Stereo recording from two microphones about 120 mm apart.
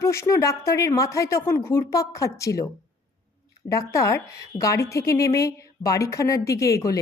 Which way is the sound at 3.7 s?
25° left (ahead or behind).